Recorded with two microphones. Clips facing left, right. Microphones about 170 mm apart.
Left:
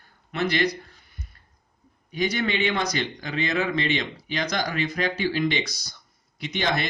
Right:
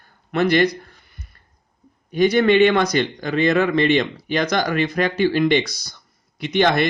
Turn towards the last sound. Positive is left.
turn(degrees=-60)  # may be behind; listen again after turning